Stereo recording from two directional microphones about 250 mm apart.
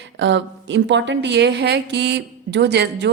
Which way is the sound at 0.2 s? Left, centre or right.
Right.